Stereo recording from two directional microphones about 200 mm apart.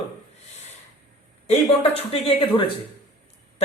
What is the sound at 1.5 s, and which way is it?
Speech, 30° left (ahead or behind).